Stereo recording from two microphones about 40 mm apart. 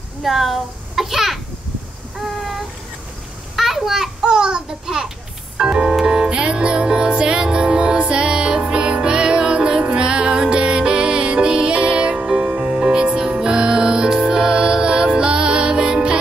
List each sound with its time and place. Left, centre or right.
0.2 s a child's voice: centre
2.1 s a sound: centre
4.2 s a child's voice: centre
5.6 s organ: right
5.9 s music: centre
12.2 s music: right
12.9 s music: right